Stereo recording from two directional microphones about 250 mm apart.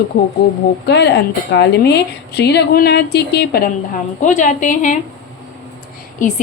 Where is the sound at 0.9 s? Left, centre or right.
Left.